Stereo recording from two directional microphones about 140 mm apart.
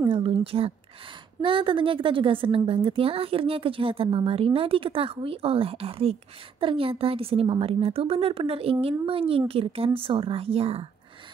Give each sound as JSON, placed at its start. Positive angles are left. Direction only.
{"t": 0.1, "sound": "a woman's voice", "side_deg": -40}